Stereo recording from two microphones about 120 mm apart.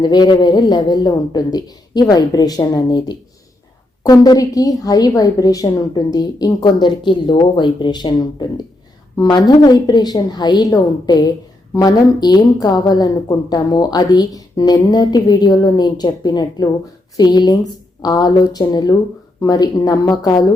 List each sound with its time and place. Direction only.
0.0 s a woman's voice: 35° left (ahead or behind)